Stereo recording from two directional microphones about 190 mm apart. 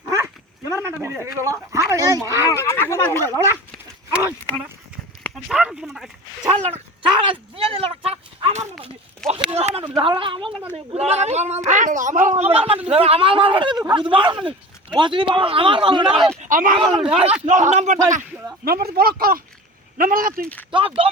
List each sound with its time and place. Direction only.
0.1 s dog: 15° right (ahead or behind)
1.4 s speech: 15° right (ahead or behind)
2.5 s speech: 15° left (ahead or behind)
3.2 s speech: 20° right (ahead or behind); by 6.1 s centre (ahead or behind)
6.7 s a sound: 30° right (ahead or behind)
8.8 s speech: 30° right (ahead or behind)
16.1 s speech: centre (ahead or behind)
16.4 s speech: 45° right (ahead or behind)
16.7 s speech: 25° right (ahead or behind)
17.4 s speech: 40° right (ahead or behind)
18.9 s speech: 50° right (ahead or behind)
20.7 s speech: 25° right (ahead or behind)